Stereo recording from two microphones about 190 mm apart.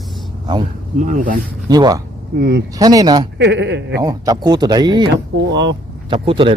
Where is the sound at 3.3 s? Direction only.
65° right (ahead or behind).